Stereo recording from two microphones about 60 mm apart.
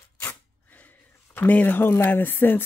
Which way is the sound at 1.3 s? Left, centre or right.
Left.